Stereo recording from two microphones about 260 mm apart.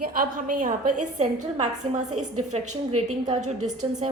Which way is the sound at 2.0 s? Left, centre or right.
Right.